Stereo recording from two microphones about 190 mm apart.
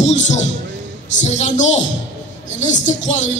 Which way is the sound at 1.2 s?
35° left (ahead or behind).